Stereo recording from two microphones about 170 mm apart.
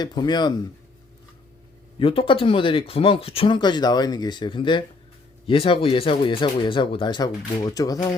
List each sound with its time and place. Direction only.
0.0 s speech: 25° left (ahead or behind)
2.0 s speech: 30° left (ahead or behind)